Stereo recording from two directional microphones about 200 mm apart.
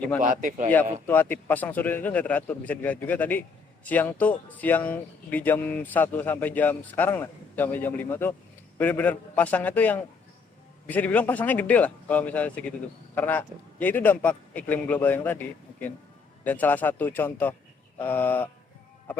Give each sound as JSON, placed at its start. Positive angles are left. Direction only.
{"t": 0.2, "sound": "speech", "side_deg": -40}
{"t": 1.0, "sound": "speech", "side_deg": 10}